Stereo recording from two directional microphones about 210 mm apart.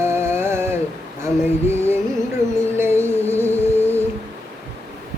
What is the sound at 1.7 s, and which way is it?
Music, 10° right (ahead or behind).